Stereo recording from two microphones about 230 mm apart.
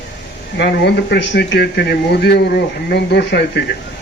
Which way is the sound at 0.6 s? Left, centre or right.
Left.